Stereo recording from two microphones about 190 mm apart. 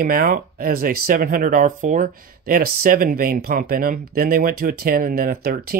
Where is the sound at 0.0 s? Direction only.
50° right (ahead or behind).